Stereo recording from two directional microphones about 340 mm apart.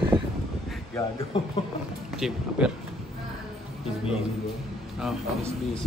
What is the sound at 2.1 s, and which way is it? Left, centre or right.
Speech, centre.